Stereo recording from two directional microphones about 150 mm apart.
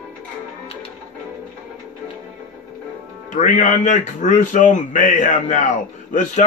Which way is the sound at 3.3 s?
55° left (ahead or behind).